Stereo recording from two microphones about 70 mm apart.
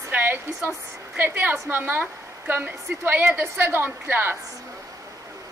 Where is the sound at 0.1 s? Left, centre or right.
Right.